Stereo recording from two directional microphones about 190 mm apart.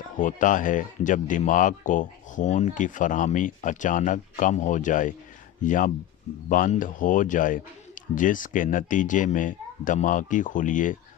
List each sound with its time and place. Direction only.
0.2 s speech: 45° left (ahead or behind)